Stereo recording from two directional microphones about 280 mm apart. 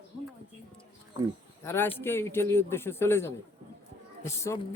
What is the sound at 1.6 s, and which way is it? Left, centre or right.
Speech, centre.